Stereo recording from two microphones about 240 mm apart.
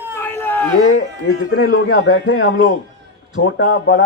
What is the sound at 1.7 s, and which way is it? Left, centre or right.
A man's voice, left.